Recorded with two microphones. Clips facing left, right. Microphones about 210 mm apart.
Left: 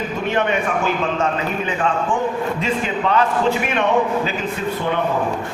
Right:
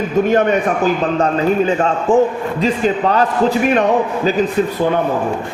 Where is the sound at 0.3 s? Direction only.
40° right (ahead or behind).